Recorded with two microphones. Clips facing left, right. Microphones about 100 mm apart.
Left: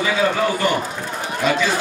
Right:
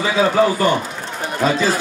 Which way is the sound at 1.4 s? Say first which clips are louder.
Right 2 dB; 35° right (ahead or behind).